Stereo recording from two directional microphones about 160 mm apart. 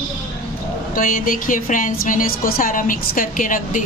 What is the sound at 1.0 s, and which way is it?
A woman's voice, 55° left (ahead or behind).